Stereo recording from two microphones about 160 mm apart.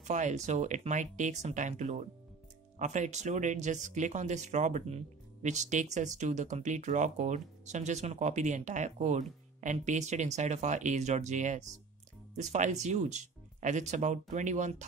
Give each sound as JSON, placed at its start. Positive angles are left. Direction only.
{"t": 0.0, "sound": "speech", "side_deg": -45}